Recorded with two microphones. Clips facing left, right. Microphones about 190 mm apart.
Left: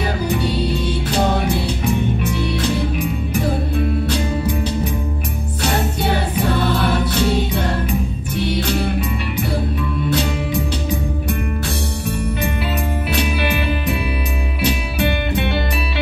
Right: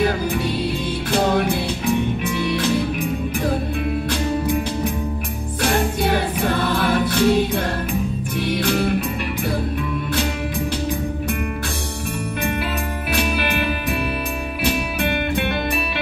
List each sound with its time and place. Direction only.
6.8 s music: 50° right (ahead or behind)
13.1 s music: 50° right (ahead or behind)